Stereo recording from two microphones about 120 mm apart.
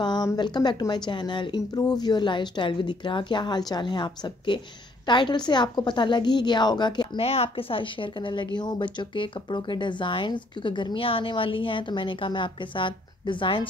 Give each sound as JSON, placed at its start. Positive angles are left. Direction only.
{"t": 0.0, "sound": "a sound", "side_deg": 35}
{"t": 0.4, "sound": "a woman's voice", "side_deg": 35}
{"t": 7.2, "sound": "speech", "side_deg": 55}